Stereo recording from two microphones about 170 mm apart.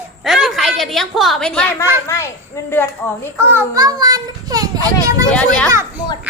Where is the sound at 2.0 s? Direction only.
15° left (ahead or behind).